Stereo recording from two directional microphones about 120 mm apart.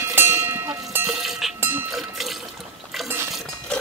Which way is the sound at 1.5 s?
20° right (ahead or behind).